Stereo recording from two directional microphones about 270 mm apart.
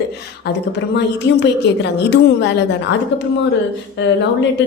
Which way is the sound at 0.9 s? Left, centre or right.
Left.